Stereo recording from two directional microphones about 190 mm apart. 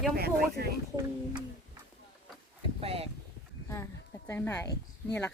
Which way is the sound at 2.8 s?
30° right (ahead or behind).